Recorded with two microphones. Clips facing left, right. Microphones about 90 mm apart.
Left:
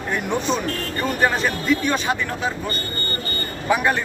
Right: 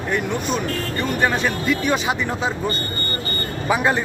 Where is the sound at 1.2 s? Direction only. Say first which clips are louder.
Even; 5° left (ahead or behind).